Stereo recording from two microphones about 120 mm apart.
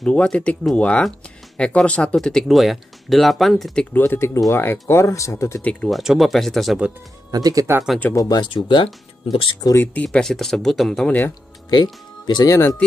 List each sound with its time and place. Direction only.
0.0 s speech: 10° left (ahead or behind)
3.9 s speech: 20° left (ahead or behind)
5.6 s speech: 10° left (ahead or behind)
5.9 s speech: centre (ahead or behind)
7.2 s speech: 30° right (ahead or behind)
8.2 s speech: 30° left (ahead or behind)
8.6 s speech: 45° left (ahead or behind)
10.0 s speech: 5° left (ahead or behind)
11.7 s speech: 35° left (ahead or behind)